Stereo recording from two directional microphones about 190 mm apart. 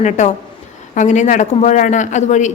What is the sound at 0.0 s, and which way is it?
A woman's voice, 40° left (ahead or behind).